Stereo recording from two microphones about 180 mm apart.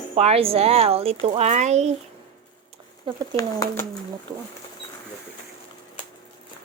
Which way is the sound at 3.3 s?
20° left (ahead or behind).